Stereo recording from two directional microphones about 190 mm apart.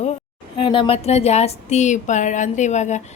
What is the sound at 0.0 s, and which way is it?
Speech, 30° left (ahead or behind).